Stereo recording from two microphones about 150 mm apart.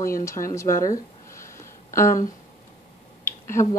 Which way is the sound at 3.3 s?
15° left (ahead or behind).